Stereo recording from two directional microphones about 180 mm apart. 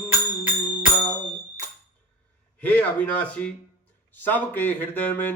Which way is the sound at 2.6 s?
10° left (ahead or behind).